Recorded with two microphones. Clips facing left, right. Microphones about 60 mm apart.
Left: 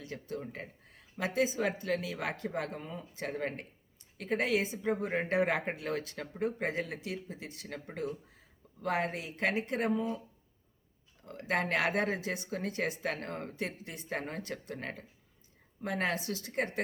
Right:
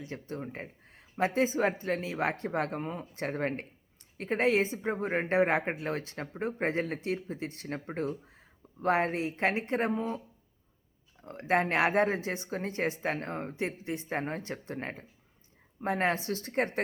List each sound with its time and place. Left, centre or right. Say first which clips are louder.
0.0 s speech: right 2 dB; right
11.2 s speech: right 5 dB; right